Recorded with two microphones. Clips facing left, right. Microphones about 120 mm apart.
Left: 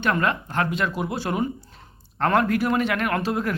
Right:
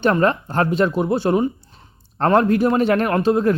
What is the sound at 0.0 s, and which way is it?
Speech, 30° right (ahead or behind).